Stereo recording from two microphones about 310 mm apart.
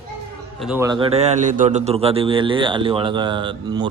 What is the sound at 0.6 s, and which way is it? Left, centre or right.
A man's voice, centre.